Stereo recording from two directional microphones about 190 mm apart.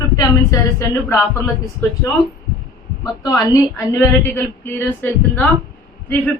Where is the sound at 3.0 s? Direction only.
20° left (ahead or behind).